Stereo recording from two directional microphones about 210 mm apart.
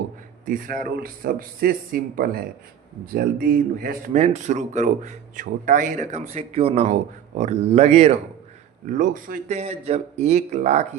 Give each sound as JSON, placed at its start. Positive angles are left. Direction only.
{"t": 0.4, "sound": "speech", "side_deg": -40}